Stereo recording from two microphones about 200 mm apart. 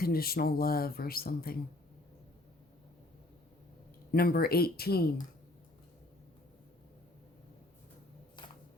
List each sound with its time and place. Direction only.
0.0 s speech: 50° left (ahead or behind)
4.1 s speech: 50° left (ahead or behind)
8.4 s camera: 25° left (ahead or behind)